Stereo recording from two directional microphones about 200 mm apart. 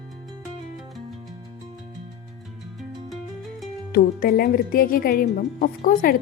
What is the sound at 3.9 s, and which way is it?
Speech, 50° left (ahead or behind).